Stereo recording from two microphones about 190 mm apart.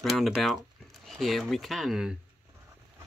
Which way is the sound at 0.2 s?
Centre (ahead or behind).